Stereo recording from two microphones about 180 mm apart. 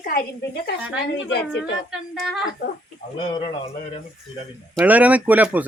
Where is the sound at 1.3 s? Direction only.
75° left (ahead or behind).